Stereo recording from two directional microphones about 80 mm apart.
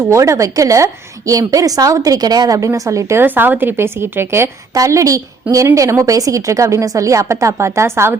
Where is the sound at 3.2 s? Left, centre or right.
Right.